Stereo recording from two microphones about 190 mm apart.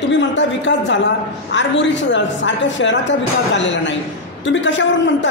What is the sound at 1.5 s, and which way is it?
A woman's voice, 70° left (ahead or behind).